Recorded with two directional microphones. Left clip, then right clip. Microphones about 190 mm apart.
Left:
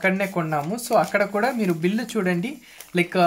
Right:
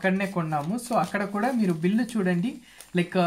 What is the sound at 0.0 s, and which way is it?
Speech, 30° left (ahead or behind).